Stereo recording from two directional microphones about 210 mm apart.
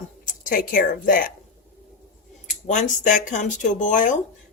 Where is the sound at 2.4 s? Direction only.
35° left (ahead or behind).